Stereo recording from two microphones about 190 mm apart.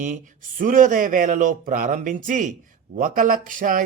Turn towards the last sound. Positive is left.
turn(degrees=-45)  # may be behind; listen again after turning